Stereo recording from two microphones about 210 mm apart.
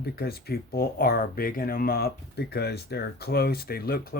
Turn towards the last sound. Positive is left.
turn(degrees=45)  # may be behind; listen again after turning